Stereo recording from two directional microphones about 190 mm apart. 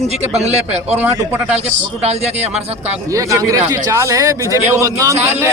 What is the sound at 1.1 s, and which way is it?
Speech, 10° right (ahead or behind).